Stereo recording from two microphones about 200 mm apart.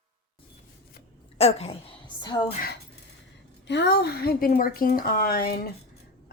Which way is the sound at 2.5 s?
45° left (ahead or behind).